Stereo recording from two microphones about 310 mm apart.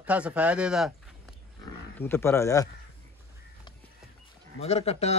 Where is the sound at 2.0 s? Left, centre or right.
Centre.